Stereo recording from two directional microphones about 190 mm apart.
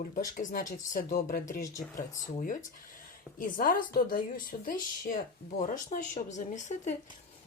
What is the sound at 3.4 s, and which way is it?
A woman's voice, 45° left (ahead or behind).